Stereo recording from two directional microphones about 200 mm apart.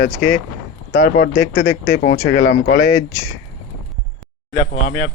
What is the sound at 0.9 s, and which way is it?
Speech, 45° left (ahead or behind).